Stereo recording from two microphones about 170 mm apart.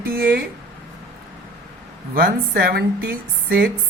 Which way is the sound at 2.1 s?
60° right (ahead or behind).